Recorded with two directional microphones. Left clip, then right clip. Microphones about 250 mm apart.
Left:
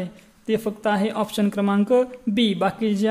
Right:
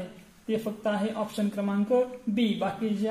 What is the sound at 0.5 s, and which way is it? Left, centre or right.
Speech, left.